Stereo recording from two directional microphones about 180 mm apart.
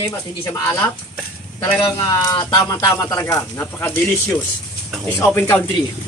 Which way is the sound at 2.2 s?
20° left (ahead or behind).